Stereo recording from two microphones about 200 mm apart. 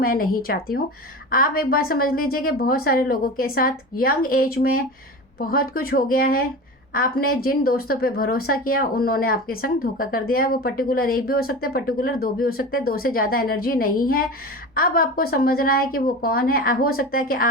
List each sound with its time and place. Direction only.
0.0 s speech: 45° left (ahead or behind)